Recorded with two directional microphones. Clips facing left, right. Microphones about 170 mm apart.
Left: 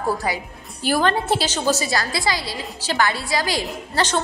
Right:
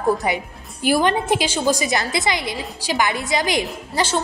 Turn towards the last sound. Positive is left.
turn(degrees=-10)  # may be behind; listen again after turning